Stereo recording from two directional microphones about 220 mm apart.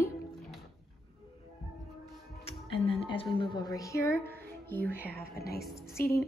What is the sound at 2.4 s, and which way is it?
Music, 25° left (ahead or behind).